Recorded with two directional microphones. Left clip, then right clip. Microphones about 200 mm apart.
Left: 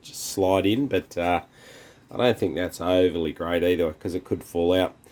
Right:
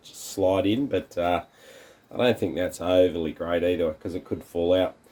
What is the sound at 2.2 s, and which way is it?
Speech, 25° left (ahead or behind).